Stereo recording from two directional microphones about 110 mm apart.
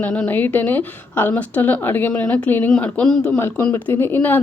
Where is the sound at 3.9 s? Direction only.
20° left (ahead or behind).